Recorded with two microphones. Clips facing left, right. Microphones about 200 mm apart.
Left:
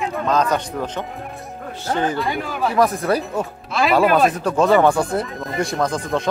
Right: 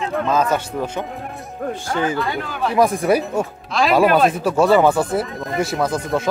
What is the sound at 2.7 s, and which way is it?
Speech, 10° right (ahead or behind).